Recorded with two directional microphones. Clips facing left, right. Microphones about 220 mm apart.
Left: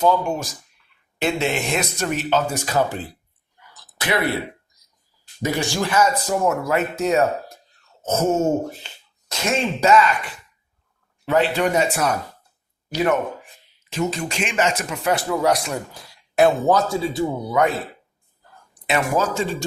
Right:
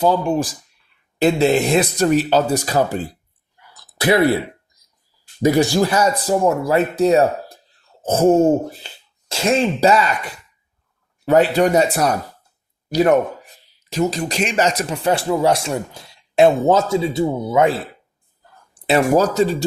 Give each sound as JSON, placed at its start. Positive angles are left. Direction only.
{"t": 0.0, "sound": "speech", "side_deg": -35}
{"t": 4.0, "sound": "speech", "side_deg": -35}
{"t": 5.5, "sound": "speech", "side_deg": -35}